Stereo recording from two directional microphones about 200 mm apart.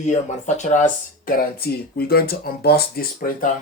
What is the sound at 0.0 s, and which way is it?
Speech, 35° left (ahead or behind).